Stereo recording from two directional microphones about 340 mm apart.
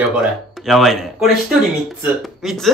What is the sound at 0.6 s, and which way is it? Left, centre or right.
Speech, centre.